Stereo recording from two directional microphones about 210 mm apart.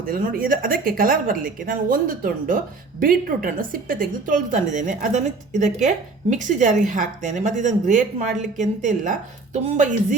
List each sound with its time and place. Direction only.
0.0 s speech: 40° right (ahead or behind)